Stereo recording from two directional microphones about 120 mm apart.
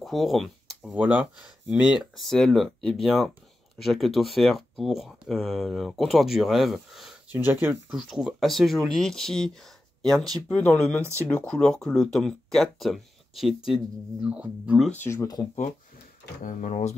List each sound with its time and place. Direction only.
0.0 s a sound: centre (ahead or behind)
0.9 s speech: 10° right (ahead or behind)
2.1 s speech: centre (ahead or behind)
7.3 s speech: 20° right (ahead or behind)
7.9 s speech: 5° right (ahead or behind)
11.0 s speech: 20° right (ahead or behind)
11.2 s speech: 10° left (ahead or behind); by 14.8 s 10° right (ahead or behind)
16.4 s speech: 85° left